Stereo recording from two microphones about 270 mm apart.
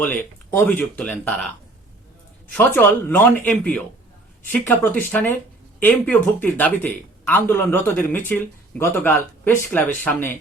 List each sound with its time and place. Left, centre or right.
0.0 s speech: centre
2.6 s speech: centre